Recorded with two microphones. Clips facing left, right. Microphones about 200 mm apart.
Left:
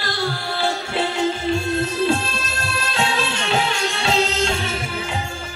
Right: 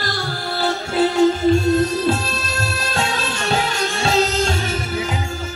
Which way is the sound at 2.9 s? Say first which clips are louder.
Left 2 dB; 40° right (ahead or behind).